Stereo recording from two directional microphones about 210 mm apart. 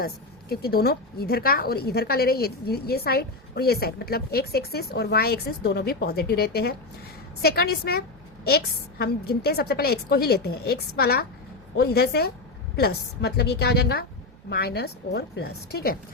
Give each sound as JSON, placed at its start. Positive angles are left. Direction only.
{"t": 0.0, "sound": "speech", "side_deg": 50}